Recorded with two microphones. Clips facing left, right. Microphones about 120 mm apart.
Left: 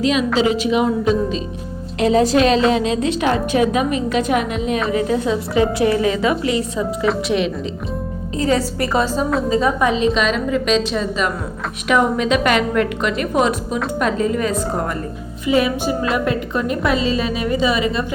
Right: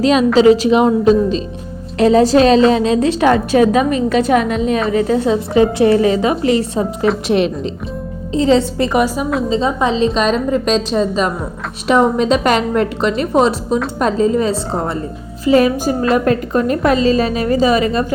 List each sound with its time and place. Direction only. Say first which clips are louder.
0.0 s a woman's voice: right 7 dB; 40° right (ahead or behind)
7.3 s a woman's voice: right 4 dB; 50° right (ahead or behind)
8.3 s a woman's voice: right 6 dB; 25° right (ahead or behind)
9.5 s a woman's voice: right 1 dB; 25° right (ahead or behind)
10.2 s a woman's voice: right 3 dB; 35° right (ahead or behind)
15.4 s a woman's voice: right 5 dB; 40° right (ahead or behind)